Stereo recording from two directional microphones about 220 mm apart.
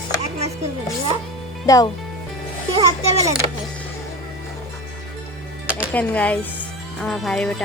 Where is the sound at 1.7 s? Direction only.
15° left (ahead or behind).